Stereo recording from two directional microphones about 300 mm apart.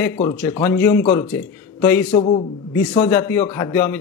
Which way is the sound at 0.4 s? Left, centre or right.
Centre.